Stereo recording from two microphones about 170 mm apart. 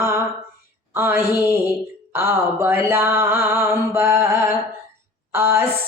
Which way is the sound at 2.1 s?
15° right (ahead or behind).